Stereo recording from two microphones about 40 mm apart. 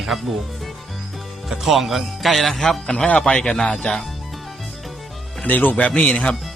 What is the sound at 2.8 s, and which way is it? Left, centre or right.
Speech, centre.